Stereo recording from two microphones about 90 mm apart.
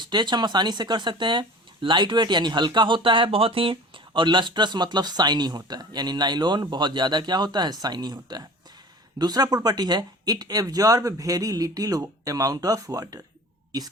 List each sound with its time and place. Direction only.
0.0 s speech: 55° right (ahead or behind)